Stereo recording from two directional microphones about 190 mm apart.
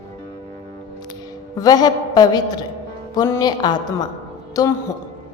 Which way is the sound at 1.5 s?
20° left (ahead or behind).